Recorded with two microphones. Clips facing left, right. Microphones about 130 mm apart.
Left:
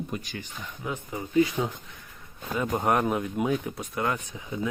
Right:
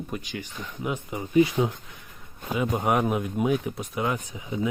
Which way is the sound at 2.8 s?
5° right (ahead or behind).